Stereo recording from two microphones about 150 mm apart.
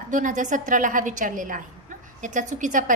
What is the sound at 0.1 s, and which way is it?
A woman's voice, 55° right (ahead or behind).